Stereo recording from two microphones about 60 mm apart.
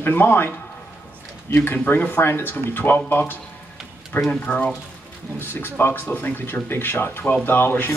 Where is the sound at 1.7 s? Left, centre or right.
Left.